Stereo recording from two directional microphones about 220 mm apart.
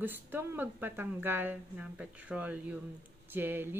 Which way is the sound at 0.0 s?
10° right (ahead or behind).